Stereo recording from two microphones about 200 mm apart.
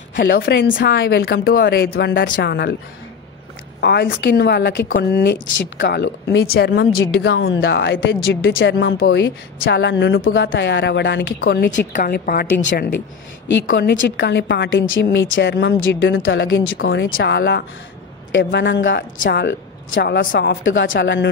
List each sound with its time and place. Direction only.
0.1 s a woman's voice: 45° left (ahead or behind)
0.4 s a woman's voice: 70° left (ahead or behind)
3.8 s a woman's voice: 55° left (ahead or behind)
4.8 s a woman's voice: 45° left (ahead or behind)
5.8 s a woman's voice: 65° left (ahead or behind)
7.4 s a woman's voice: 70° left (ahead or behind); by 12.8 s 50° left (ahead or behind)
13.7 s a woman's voice: 60° left (ahead or behind)
15.0 s a woman's voice: 70° left (ahead or behind); by 20.4 s 50° left (ahead or behind)
20.4 s a woman's voice: 70° left (ahead or behind)